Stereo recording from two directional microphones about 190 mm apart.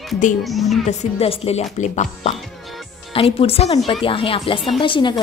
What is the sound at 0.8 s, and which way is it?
A woman's voice, 30° left (ahead or behind).